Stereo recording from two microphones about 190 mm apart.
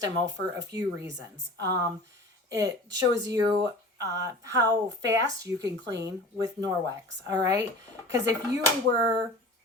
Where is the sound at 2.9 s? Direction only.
70° right (ahead or behind).